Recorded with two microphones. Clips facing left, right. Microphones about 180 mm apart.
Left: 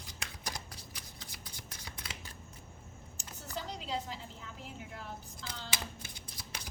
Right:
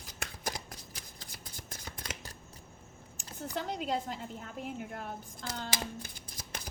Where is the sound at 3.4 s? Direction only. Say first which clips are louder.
Right 6 dB; 50° right (ahead or behind).